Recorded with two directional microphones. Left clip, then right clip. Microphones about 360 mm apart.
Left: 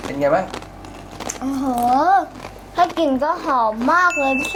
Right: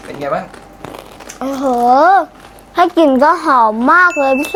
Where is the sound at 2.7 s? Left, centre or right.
Right.